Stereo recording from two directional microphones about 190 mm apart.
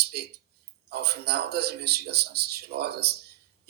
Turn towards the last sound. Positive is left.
turn(degrees=-55)  # may be behind; listen again after turning